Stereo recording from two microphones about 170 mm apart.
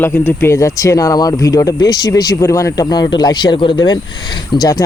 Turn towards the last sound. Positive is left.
turn(degrees=25)  # may be behind; listen again after turning